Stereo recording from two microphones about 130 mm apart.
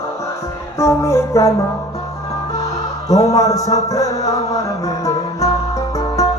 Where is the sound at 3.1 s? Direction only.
25° left (ahead or behind).